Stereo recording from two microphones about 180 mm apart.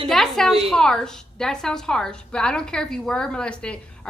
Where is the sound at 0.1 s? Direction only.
Centre (ahead or behind).